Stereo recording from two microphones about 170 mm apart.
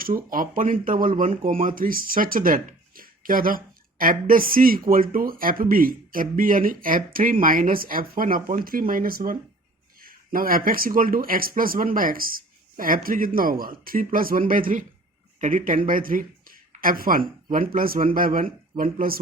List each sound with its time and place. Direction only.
0.0 s speech: 55° right (ahead or behind)